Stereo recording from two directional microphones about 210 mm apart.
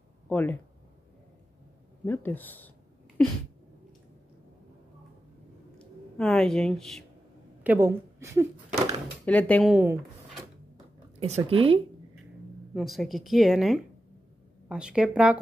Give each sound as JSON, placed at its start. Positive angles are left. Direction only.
{"t": 0.3, "sound": "speech", "side_deg": 10}
{"t": 2.0, "sound": "speech", "side_deg": 10}
{"t": 5.8, "sound": "speech", "side_deg": 0}
{"t": 7.6, "sound": "a woman's voice", "side_deg": -10}
{"t": 9.2, "sound": "a woman's voice", "side_deg": 5}
{"t": 11.1, "sound": "speech", "side_deg": -30}
{"t": 12.7, "sound": "a woman's voice", "side_deg": 0}